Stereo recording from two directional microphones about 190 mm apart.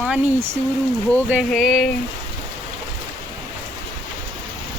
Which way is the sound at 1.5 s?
Centre (ahead or behind).